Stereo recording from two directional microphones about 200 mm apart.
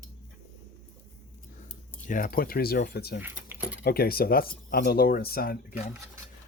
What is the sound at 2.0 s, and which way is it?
Speech, 40° left (ahead or behind).